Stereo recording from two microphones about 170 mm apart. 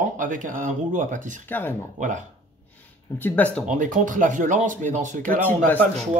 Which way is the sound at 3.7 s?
50° right (ahead or behind).